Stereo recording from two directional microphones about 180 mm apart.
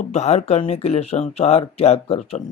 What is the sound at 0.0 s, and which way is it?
Speech, 40° left (ahead or behind).